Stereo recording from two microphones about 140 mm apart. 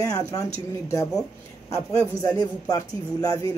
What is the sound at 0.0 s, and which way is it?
Speech, 20° left (ahead or behind).